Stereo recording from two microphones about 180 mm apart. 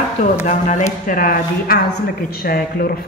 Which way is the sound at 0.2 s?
40° left (ahead or behind).